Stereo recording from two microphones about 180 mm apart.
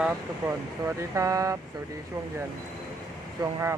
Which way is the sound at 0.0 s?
10° right (ahead or behind).